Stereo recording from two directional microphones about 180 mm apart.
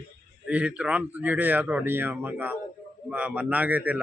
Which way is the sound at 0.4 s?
5° right (ahead or behind).